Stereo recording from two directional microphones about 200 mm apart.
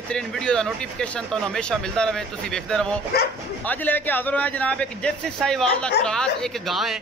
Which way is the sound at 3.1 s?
50° left (ahead or behind).